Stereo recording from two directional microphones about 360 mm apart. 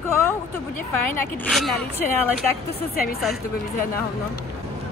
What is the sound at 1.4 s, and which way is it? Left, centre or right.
Speech, centre.